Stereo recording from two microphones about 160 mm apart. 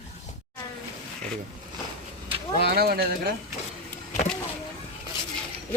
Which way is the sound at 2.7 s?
75° right (ahead or behind).